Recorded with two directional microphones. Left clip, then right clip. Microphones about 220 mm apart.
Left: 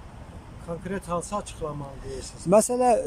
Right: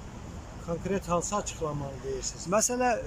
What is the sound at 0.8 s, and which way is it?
Speech, centre (ahead or behind).